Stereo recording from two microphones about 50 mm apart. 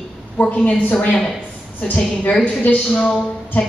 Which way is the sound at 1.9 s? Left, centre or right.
Left.